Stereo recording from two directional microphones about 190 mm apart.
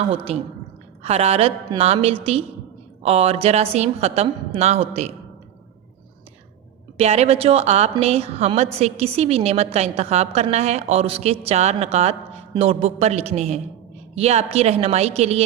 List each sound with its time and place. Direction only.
0.1 s a woman's voice: 30° right (ahead or behind)
6.9 s a woman's voice: 35° right (ahead or behind)